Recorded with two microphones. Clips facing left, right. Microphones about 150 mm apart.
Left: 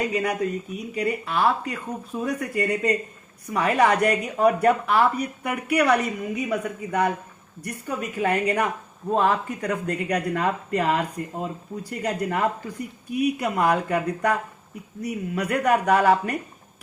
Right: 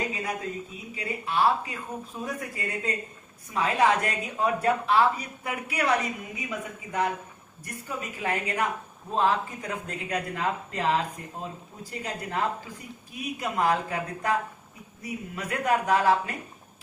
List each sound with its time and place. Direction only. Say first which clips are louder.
0.1 s a man's voice: left 8 dB; 80° left